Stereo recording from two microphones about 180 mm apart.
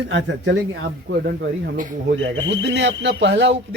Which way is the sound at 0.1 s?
85° right.